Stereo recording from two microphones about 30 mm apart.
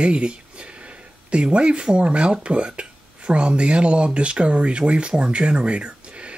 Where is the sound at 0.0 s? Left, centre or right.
Right.